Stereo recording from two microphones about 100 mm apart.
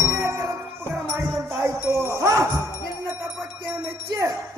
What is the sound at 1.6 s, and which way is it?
Wind chime, 25° right (ahead or behind).